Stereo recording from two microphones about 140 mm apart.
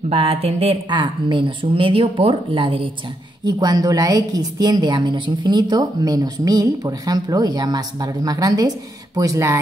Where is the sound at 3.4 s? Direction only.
30° right (ahead or behind).